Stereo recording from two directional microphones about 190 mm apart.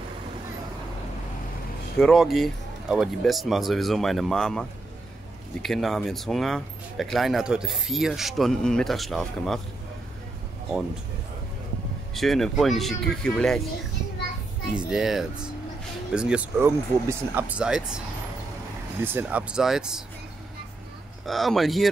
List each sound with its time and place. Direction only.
2.0 s speech: centre (ahead or behind)
12.1 s speech: centre (ahead or behind)
14.9 s speech: centre (ahead or behind)
21.3 s speech: centre (ahead or behind)